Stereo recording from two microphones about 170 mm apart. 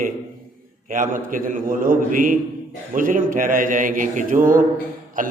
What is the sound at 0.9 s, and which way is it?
A man's voice, 50° right (ahead or behind).